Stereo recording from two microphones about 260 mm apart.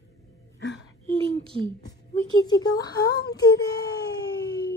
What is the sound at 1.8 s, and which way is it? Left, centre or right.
Speech, centre.